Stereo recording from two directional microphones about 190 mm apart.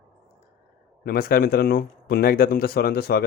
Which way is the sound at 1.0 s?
50° left (ahead or behind).